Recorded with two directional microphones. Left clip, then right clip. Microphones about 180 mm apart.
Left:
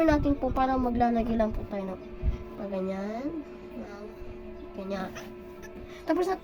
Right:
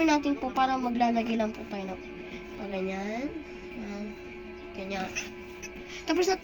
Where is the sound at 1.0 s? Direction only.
35° left (ahead or behind).